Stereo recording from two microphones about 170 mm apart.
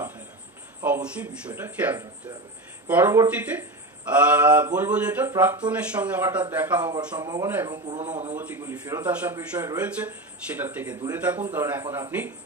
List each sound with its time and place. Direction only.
0.8 s speech: 10° right (ahead or behind)
6.8 s speech: 25° right (ahead or behind)
8.0 s a man's voice: 40° right (ahead or behind)
8.4 s speech: 15° right (ahead or behind)